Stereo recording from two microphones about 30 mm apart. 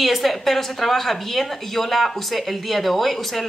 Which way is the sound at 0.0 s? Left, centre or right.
Centre.